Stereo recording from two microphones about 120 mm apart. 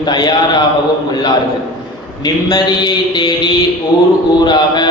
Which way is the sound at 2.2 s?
35° left (ahead or behind).